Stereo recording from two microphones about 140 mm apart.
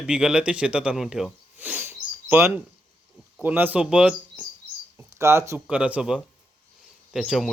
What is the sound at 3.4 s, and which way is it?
A man's voice, 15° right (ahead or behind).